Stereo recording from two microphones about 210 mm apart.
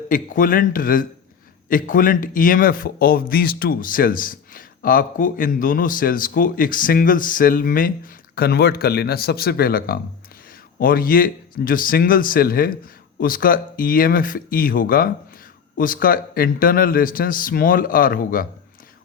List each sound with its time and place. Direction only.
0.1 s a man's voice: 40° left (ahead or behind)